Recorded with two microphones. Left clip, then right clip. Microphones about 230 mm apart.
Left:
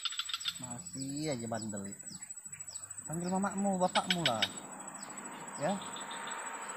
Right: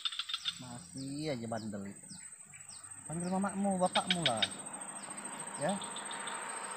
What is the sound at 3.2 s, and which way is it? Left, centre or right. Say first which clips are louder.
Speech: left 1 dB; centre.